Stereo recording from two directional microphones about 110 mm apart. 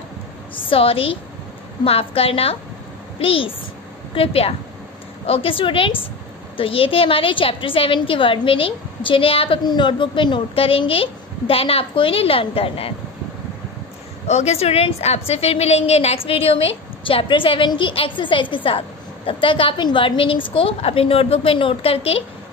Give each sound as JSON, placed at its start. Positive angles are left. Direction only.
{"t": 0.6, "sound": "a woman's voice", "side_deg": 55}
{"t": 9.7, "sound": "a woman's voice", "side_deg": 45}
{"t": 14.2, "sound": "a woman's voice", "side_deg": 90}